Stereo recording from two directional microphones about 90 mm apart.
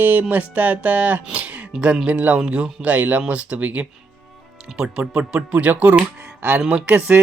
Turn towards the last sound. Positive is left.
turn(degrees=-15)  # may be behind; listen again after turning